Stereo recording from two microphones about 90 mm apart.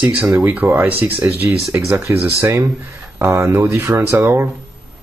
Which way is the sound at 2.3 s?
35° right (ahead or behind).